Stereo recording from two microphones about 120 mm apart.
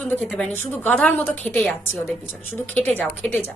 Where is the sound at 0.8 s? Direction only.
15° left (ahead or behind).